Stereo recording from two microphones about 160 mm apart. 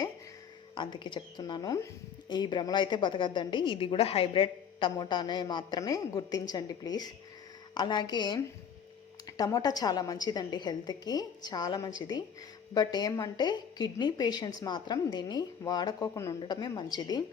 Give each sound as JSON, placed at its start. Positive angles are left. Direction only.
{"t": 0.8, "sound": "a woman's voice", "side_deg": 30}
{"t": 9.4, "sound": "a woman's voice", "side_deg": 25}